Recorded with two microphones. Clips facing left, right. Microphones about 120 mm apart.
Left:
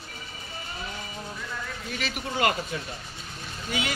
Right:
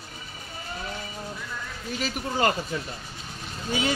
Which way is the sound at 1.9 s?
35° right (ahead or behind).